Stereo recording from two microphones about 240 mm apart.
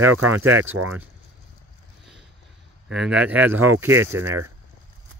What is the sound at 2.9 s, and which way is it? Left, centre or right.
Speech, centre.